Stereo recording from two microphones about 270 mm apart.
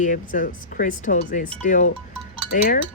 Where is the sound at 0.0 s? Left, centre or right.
Left.